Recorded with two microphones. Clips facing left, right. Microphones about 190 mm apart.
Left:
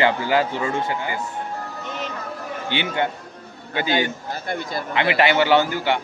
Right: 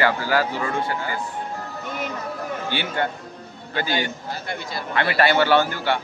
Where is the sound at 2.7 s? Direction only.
20° left (ahead or behind).